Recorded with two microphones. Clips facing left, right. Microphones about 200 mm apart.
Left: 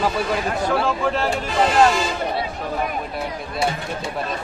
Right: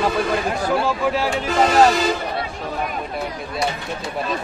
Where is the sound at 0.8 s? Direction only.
5° right (ahead or behind).